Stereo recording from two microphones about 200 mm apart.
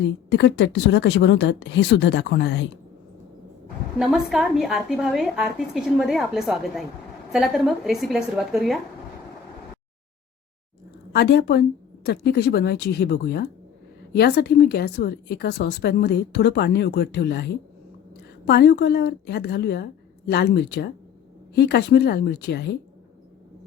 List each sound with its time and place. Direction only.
0.0 s speech: 60° left (ahead or behind)
3.9 s a woman's voice: centre (ahead or behind)
11.1 s a woman's voice: 55° left (ahead or behind)